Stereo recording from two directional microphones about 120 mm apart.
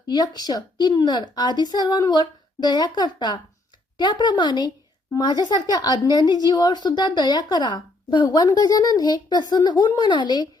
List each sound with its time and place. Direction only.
0.1 s speech: 35° left (ahead or behind)